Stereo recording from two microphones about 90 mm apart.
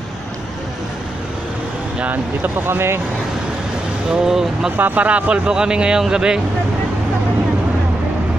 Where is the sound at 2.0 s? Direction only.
20° right (ahead or behind).